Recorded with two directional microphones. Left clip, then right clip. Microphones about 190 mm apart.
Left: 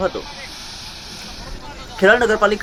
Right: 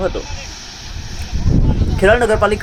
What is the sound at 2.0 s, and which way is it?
Speech, 5° right (ahead or behind).